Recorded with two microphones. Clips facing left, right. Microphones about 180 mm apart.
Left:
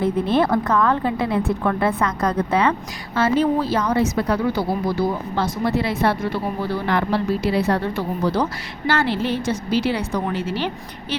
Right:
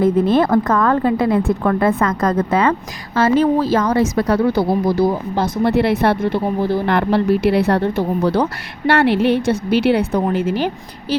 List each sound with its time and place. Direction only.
0.0 s a woman's voice: 45° right (ahead or behind)
3.9 s a woman's voice: 90° right
4.2 s speech: 45° right (ahead or behind)
5.6 s speech: 65° right (ahead or behind)
10.3 s a woman's voice: 50° right (ahead or behind)